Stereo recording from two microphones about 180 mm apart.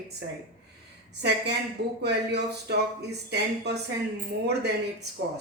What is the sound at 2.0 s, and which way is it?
Speech, 70° right (ahead or behind).